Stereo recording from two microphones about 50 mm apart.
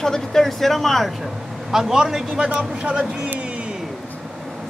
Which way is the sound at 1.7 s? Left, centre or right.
Centre.